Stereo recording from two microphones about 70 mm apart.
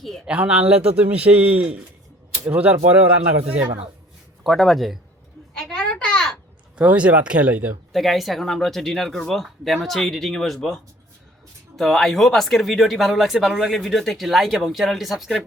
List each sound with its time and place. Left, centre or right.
0.3 s a man's voice: centre
4.4 s speech: centre
5.6 s a sound: centre
6.7 s speech: centre
7.9 s speech: centre
11.8 s speech: centre